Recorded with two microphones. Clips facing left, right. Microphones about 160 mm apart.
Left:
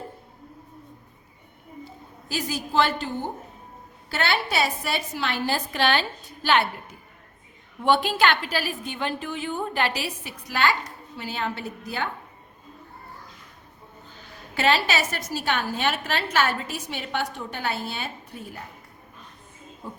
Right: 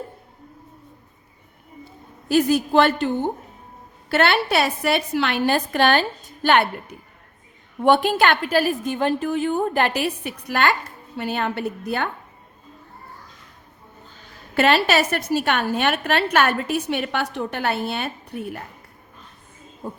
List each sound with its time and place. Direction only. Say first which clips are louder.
2.3 s a woman's voice: right 9 dB; 60° right (ahead or behind)
4.1 s a woman's voice: right 7 dB; 60° right (ahead or behind)
7.8 s a woman's voice: right 4 dB; 55° right (ahead or behind)
14.5 s a woman's voice: right 5 dB; 60° right (ahead or behind)
19.8 s a woman's voice: right 6 dB; 45° right (ahead or behind)